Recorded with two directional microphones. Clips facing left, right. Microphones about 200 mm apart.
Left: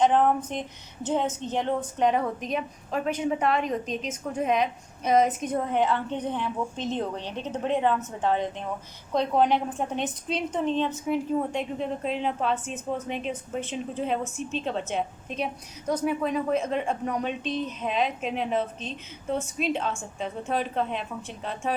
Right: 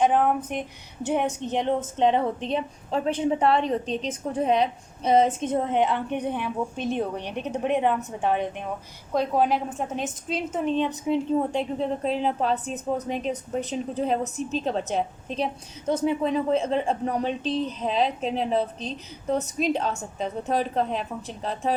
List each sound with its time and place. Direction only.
0.0 s a woman's voice: 10° right (ahead or behind); by 21.8 s 35° right (ahead or behind)